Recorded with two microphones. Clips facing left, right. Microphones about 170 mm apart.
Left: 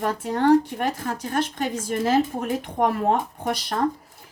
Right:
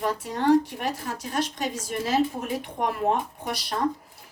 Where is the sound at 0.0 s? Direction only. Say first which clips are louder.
Left 3 dB; 55° left (ahead or behind).